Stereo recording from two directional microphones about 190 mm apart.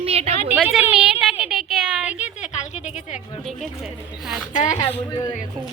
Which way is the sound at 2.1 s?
35° left (ahead or behind).